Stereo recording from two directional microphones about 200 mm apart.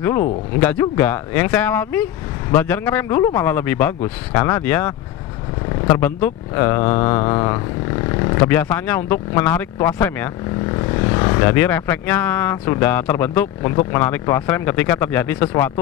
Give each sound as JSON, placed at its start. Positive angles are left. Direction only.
{"t": 0.6, "sound": "speech", "side_deg": 10}